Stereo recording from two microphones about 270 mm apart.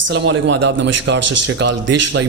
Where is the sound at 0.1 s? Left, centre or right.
Right.